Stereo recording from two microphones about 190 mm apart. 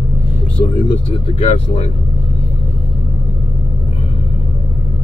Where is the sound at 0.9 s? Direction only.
30° left (ahead or behind).